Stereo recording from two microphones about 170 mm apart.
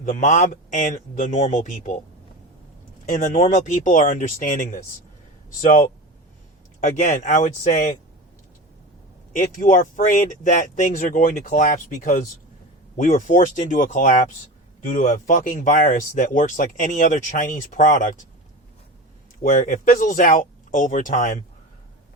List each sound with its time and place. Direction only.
0.0 s speech: 50° left (ahead or behind)
3.1 s speech: 50° left (ahead or behind)
6.7 s speech: 45° left (ahead or behind)
9.3 s speech: 50° left (ahead or behind)
19.4 s speech: 50° left (ahead or behind)